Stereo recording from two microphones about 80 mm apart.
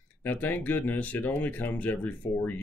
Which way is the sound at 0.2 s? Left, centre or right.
Left.